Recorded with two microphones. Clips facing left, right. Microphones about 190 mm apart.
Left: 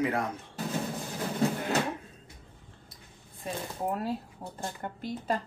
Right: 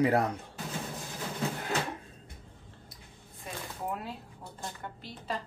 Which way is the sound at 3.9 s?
45° left (ahead or behind).